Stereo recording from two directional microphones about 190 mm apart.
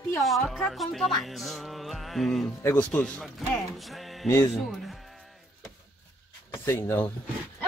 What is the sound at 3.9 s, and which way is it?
Music, centre (ahead or behind).